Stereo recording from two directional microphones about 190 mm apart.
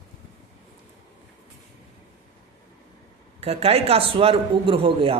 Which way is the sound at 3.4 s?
30° right (ahead or behind).